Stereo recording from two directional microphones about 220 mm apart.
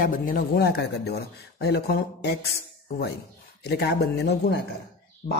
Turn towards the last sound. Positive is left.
turn(degrees=25)  # may be behind; listen again after turning